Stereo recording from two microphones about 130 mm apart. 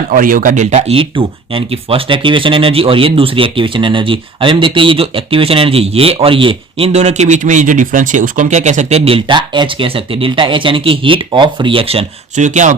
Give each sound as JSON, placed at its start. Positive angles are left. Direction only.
{"t": 0.1, "sound": "speech", "side_deg": -90}
{"t": 12.4, "sound": "speech", "side_deg": -70}